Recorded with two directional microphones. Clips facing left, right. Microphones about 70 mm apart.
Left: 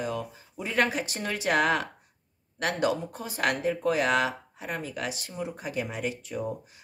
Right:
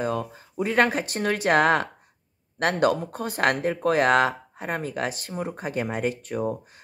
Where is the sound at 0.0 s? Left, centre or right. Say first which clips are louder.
Right 5 dB; right.